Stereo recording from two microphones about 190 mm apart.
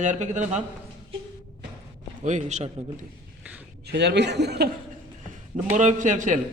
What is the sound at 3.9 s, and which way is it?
Speech, 65° right (ahead or behind).